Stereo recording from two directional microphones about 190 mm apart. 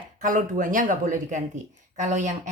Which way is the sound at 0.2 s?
45° right (ahead or behind).